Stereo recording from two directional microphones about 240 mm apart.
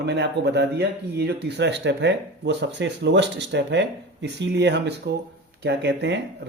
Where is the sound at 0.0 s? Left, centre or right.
Right.